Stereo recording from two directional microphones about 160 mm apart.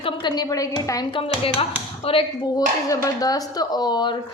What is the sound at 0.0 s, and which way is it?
Speech, 25° left (ahead or behind).